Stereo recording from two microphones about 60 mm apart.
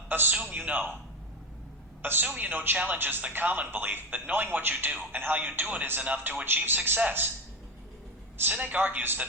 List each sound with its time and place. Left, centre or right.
0.1 s a man's voice: right
2.0 s a woman's voice: right
2.2 s speech: right
8.4 s speech: right